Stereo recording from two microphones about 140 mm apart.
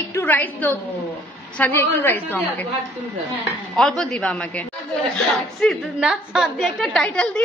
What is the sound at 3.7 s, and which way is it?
A woman's voice, 5° left (ahead or behind).